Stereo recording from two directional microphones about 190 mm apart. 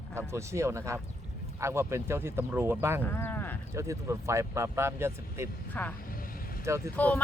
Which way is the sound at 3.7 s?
15° right (ahead or behind).